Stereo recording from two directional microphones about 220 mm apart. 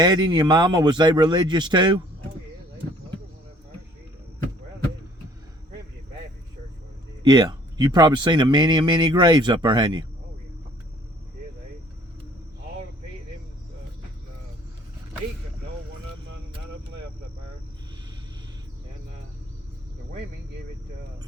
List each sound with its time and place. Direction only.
0.0 s speech: 20° right (ahead or behind)
7.2 s speech: 20° right (ahead or behind)